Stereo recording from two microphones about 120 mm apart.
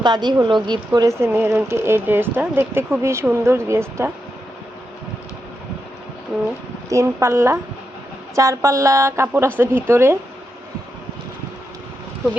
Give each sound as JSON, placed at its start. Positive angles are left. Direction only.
{"t": 0.0, "sound": "speech", "side_deg": -40}
{"t": 1.0, "sound": "speech", "side_deg": -20}
{"t": 6.3, "sound": "speech", "side_deg": 0}
{"t": 6.9, "sound": "speech", "side_deg": -25}